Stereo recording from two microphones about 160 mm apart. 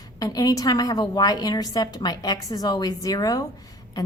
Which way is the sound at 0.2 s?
25° left (ahead or behind).